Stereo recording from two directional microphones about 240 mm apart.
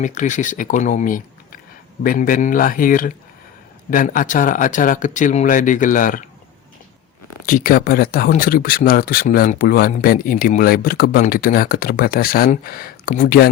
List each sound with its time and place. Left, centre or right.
0.0 s speech: left
7.4 s speech: left